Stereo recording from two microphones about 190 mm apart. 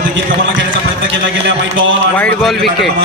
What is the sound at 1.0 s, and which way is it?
A man's voice, 80° right.